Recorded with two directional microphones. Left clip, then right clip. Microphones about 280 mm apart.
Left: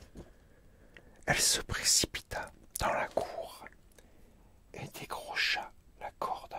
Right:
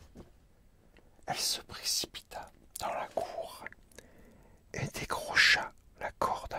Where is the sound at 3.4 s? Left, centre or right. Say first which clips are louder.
Right 2 dB; centre.